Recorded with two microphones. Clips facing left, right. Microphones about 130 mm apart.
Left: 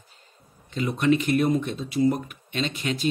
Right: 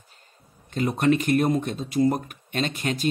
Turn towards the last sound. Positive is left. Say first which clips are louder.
# right 1 dB
turn(degrees=-45)  # may be behind; listen again after turning